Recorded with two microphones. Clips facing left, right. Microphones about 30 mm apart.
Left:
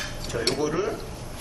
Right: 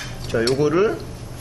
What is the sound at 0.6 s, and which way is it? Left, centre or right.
Speech, right.